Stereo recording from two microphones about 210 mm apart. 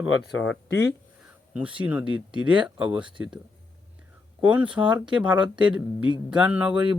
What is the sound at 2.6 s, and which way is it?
Speech, 5° right (ahead or behind).